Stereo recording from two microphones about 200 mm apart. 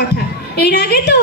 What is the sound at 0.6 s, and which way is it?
Speech, 55° left (ahead or behind).